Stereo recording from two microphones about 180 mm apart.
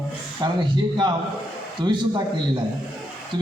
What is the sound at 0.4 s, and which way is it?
Speech, 25° right (ahead or behind).